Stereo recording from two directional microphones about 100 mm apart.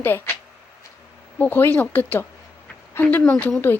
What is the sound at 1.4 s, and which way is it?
Speech, 20° left (ahead or behind).